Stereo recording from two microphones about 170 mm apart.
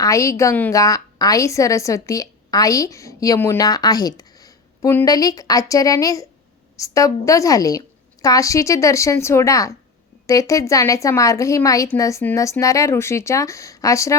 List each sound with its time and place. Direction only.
0.0 s a woman's voice: 20° left (ahead or behind)